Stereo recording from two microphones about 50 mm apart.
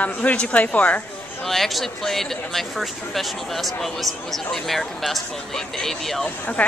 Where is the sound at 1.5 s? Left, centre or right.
Centre.